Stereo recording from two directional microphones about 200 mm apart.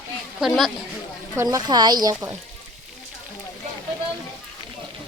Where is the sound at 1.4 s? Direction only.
20° right (ahead or behind).